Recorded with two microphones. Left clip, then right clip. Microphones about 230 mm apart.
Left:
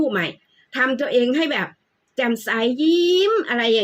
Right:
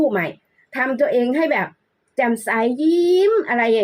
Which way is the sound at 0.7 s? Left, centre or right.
Right.